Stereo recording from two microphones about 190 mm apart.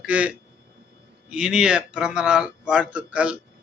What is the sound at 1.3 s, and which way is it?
A man's voice, 5° right (ahead or behind).